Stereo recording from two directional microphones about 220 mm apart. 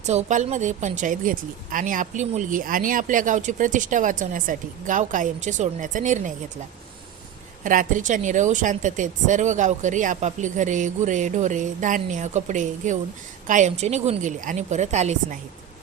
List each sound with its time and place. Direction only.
0.0 s speech: 30° right (ahead or behind)
7.6 s speech: 35° right (ahead or behind)